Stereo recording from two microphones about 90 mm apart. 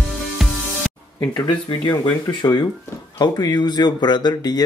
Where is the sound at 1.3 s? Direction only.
55° left (ahead or behind).